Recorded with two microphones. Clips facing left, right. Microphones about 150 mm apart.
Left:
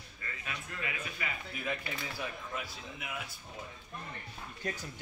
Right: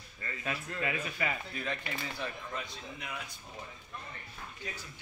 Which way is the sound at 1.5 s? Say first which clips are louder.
Even; 10° left (ahead or behind).